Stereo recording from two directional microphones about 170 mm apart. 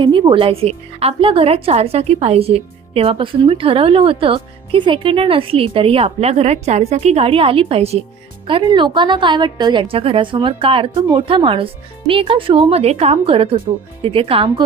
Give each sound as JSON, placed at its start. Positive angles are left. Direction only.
{"t": 0.0, "sound": "a woman's voice", "side_deg": -30}